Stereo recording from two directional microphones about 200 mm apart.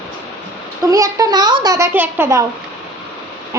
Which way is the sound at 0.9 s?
15° right (ahead or behind).